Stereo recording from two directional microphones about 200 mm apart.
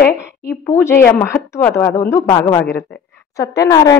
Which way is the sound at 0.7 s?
15° left (ahead or behind).